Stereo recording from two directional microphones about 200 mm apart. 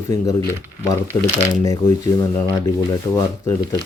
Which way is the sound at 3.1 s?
15° left (ahead or behind).